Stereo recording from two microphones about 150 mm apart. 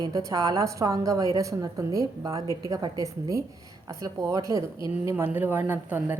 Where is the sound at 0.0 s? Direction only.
20° right (ahead or behind).